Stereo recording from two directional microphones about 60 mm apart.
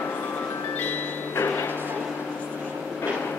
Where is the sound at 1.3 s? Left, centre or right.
Left.